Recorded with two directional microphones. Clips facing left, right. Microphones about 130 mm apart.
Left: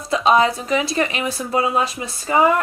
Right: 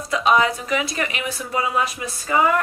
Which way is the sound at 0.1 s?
30° left (ahead or behind).